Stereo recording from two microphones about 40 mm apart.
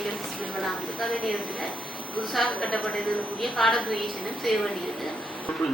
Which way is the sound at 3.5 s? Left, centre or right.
Centre.